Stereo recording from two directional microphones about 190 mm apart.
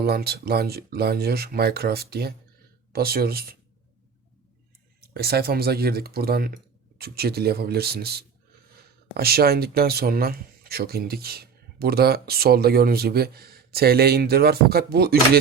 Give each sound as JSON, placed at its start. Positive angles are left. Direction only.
{"t": 0.0, "sound": "speech", "side_deg": -55}
{"t": 5.1, "sound": "speech", "side_deg": -55}